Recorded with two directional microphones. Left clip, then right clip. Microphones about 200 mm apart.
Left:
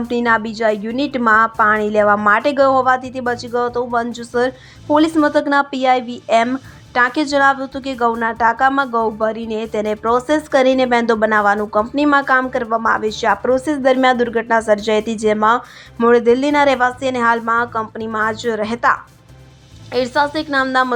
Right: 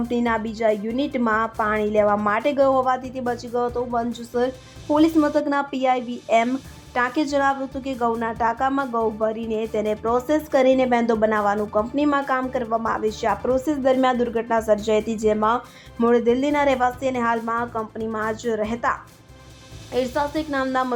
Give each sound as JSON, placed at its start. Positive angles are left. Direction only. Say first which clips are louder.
{"t": 0.1, "sound": "a woman's voice", "louder": "left 9 dB", "side_deg": 20}